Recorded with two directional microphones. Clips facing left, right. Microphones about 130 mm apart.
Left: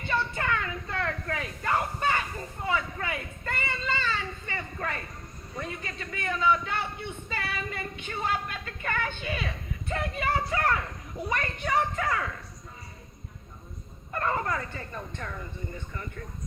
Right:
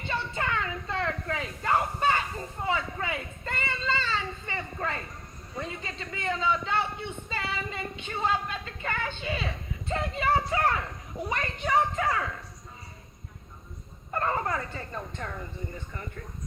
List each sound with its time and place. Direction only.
0.0 s a sound: 25° right (ahead or behind)
5.5 s a woman's voice: 25° right (ahead or behind)
14.1 s speech: 30° right (ahead or behind)